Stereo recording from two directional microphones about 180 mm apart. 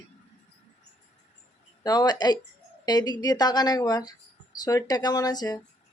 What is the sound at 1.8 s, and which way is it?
Speech, 20° left (ahead or behind).